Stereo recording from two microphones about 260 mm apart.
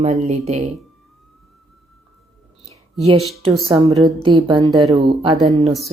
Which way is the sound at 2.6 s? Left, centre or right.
Right.